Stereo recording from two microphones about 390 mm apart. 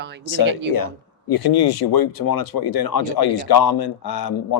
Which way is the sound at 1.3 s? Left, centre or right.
Left.